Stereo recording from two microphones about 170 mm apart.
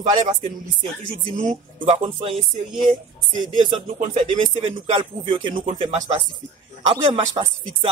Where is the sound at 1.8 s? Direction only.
35° right (ahead or behind).